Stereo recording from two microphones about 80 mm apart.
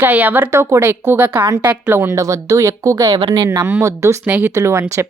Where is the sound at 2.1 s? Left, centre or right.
Right.